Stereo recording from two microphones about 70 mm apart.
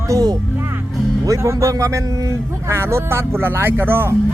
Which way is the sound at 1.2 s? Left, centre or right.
Right.